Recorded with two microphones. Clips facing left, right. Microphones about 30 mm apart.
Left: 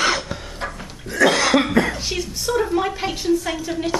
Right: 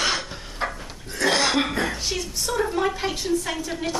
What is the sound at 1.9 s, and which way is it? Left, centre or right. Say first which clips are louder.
A woman's voice: left 2 dB; centre.